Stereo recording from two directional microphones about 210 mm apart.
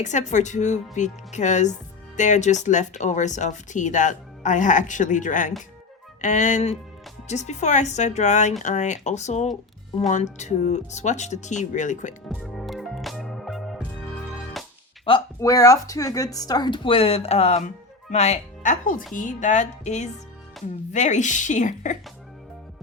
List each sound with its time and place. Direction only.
0.0 s speech: 35° left (ahead or behind)
12.3 s music: centre (ahead or behind)
15.0 s a woman's voice: 20° left (ahead or behind); by 21.9 s 35° left (ahead or behind)